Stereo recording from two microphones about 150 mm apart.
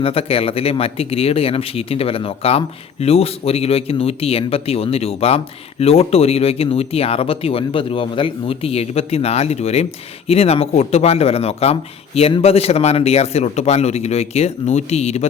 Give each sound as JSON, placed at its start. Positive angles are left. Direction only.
{"t": 0.0, "sound": "speech", "side_deg": 40}